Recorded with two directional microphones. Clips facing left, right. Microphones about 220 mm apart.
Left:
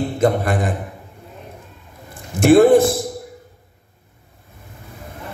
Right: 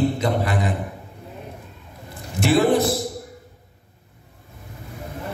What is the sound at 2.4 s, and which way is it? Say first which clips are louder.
Speech: left 7 dB; 50° left (ahead or behind).